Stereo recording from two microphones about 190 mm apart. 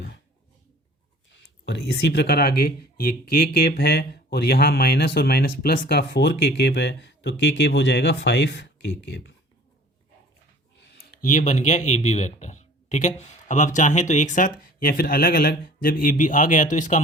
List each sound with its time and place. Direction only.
1.6 s speech: 65° left (ahead or behind)
11.1 s speech: 45° left (ahead or behind)